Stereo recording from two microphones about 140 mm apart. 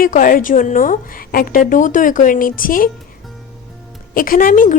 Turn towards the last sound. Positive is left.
turn(degrees=70)  # may be behind; listen again after turning